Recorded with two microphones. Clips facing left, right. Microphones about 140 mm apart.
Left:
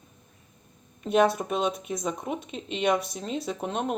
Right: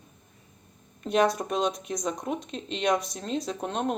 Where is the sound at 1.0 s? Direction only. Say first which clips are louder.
Left 2 dB; centre (ahead or behind).